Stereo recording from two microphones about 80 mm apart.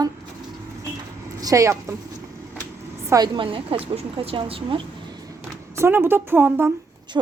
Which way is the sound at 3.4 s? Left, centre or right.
Right.